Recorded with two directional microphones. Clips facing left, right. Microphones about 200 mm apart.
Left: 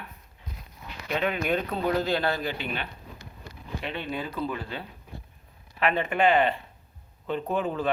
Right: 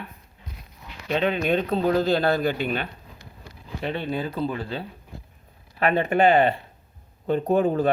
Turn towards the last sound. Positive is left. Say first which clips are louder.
# right 7 dB
turn(degrees=-45)  # may be behind; listen again after turning